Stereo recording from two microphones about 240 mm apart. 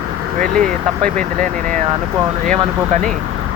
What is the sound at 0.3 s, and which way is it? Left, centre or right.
Speech, right.